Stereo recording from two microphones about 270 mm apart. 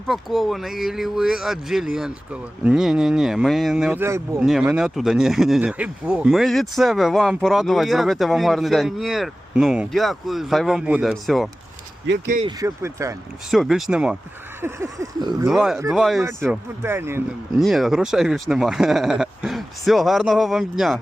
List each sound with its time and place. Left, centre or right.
0.1 s speech: centre
12.0 s speech: right
12.4 s speech: centre
13.5 s speech: centre
15.4 s speech: centre